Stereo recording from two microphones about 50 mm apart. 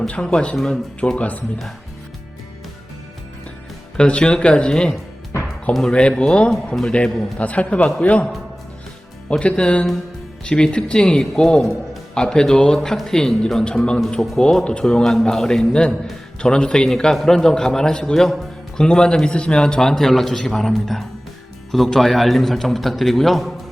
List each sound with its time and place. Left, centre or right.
0.1 s a man's voice: left
1.1 s a man's voice: left
3.9 s a man's voice: centre
9.4 s a man's voice: left; by 23.6 s centre